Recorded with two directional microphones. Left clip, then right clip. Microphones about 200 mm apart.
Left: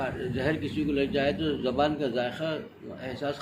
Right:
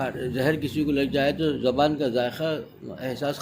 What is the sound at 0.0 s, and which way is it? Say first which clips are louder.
A man's voice: right 4 dB; 60° right (ahead or behind).